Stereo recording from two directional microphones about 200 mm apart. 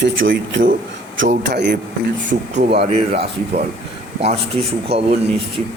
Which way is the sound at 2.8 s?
30° right (ahead or behind).